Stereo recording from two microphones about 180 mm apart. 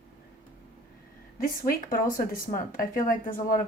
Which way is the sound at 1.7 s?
50° left (ahead or behind).